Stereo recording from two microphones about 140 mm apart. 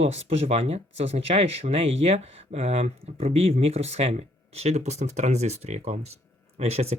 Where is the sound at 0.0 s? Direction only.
50° right (ahead or behind).